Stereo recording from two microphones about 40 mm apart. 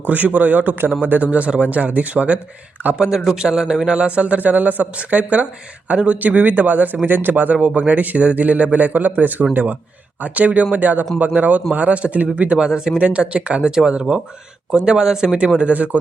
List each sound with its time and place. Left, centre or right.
0.0 s a man's voice: right
1.2 s speech: right
2.8 s a man's voice: right
3.3 s a man's voice: centre
10.8 s a man's voice: right
12.5 s a man's voice: centre
13.0 s a man's voice: right
15.5 s speech: right